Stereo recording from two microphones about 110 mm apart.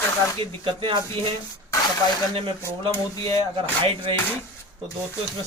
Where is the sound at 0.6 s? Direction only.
50° right (ahead or behind).